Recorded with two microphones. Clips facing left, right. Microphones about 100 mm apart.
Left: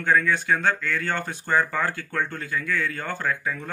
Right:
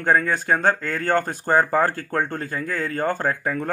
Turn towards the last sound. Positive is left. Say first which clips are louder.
# right 4 dB
turn(degrees=-45)  # may be behind; listen again after turning